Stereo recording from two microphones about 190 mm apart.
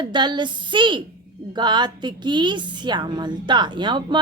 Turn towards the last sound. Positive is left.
turn(degrees=-25)  # may be behind; listen again after turning